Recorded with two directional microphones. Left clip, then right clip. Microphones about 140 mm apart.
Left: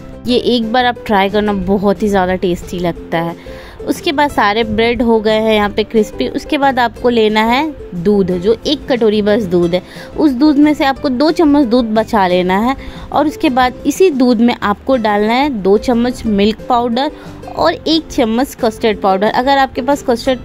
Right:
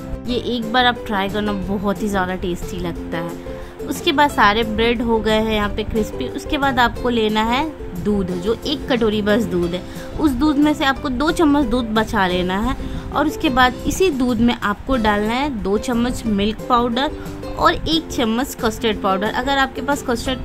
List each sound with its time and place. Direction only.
0.3 s a woman's voice: 45° left (ahead or behind); by 16.2 s 20° left (ahead or behind)
16.3 s a woman's voice: 40° left (ahead or behind)
17.6 s a woman's voice: 25° left (ahead or behind)